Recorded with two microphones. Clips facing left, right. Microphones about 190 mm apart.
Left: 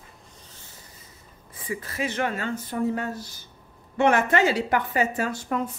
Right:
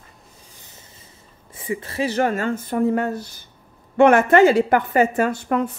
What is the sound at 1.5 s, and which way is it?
A woman's voice, 25° right (ahead or behind).